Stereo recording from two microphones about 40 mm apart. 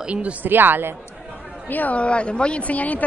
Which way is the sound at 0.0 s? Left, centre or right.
Right.